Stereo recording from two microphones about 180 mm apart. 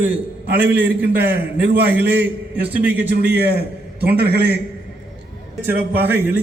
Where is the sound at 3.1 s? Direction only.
65° right (ahead or behind).